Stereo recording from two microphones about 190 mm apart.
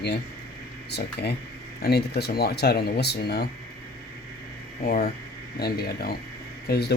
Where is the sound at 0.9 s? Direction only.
60° left (ahead or behind).